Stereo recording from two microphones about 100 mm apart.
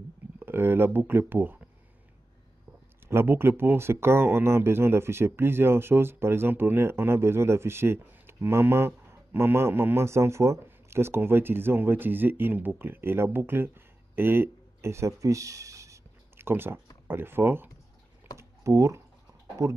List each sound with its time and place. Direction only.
0.4 s speech: 20° right (ahead or behind)
3.1 s speech: 25° right (ahead or behind)
18.4 s typing: 30° right (ahead or behind)
19.6 s speech: 35° right (ahead or behind)